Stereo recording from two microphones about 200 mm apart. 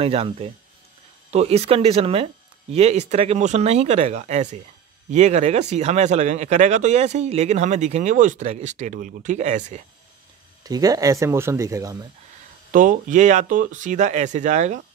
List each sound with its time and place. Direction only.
0.0 s speech: 30° right (ahead or behind)
10.6 s speech: 20° right (ahead or behind)
12.7 s speech: 40° right (ahead or behind)